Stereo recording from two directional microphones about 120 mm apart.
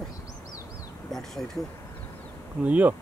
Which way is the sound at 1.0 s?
5° left (ahead or behind).